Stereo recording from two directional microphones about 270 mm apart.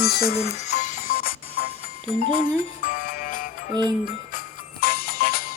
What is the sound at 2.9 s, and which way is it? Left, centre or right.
Music, left.